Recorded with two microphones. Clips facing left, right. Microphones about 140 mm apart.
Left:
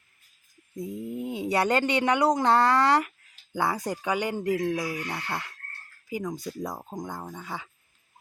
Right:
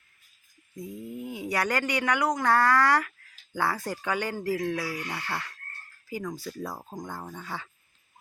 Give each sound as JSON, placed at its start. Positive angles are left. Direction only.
{"t": 0.8, "sound": "speech", "side_deg": 25}